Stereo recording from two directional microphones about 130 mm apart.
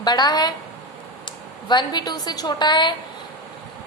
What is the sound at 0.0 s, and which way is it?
A woman's voice, 30° left (ahead or behind).